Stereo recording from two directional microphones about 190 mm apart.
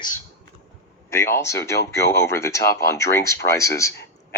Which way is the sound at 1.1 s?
15° left (ahead or behind).